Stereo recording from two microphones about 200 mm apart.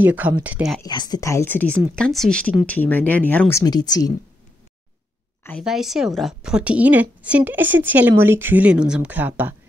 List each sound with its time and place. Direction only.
0.0 s a woman's voice: 10° right (ahead or behind)
0.8 s speech: 20° left (ahead or behind)
5.6 s a woman's voice: centre (ahead or behind)